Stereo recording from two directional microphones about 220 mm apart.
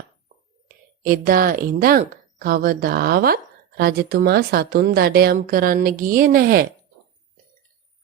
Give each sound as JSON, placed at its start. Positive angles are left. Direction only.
{"t": 1.0, "sound": "a woman's voice", "side_deg": -40}